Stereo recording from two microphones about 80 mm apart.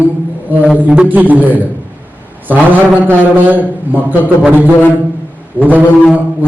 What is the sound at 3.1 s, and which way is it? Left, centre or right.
Speech, right.